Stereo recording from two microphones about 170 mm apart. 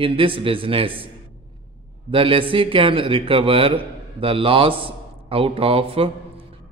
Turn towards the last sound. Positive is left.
turn(degrees=-35)  # may be behind; listen again after turning